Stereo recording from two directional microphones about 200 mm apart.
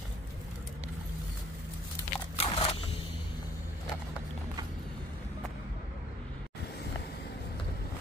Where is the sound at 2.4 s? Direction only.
30° left (ahead or behind).